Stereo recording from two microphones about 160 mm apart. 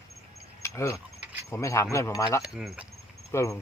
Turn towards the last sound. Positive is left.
turn(degrees=20)  # may be behind; listen again after turning